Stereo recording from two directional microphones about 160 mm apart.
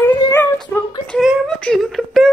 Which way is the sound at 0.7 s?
15° left (ahead or behind).